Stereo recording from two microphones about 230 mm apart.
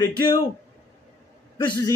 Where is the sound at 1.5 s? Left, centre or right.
Centre.